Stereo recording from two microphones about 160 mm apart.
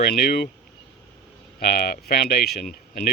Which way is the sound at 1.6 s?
70° left (ahead or behind).